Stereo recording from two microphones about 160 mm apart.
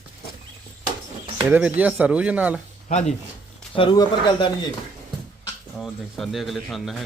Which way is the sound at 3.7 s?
30° left (ahead or behind).